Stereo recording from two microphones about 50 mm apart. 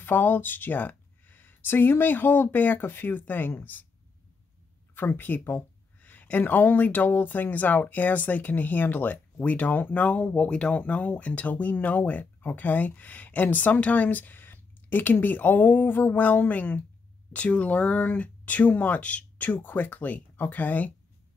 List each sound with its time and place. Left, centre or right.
0.0 s speech: left
4.9 s speech: left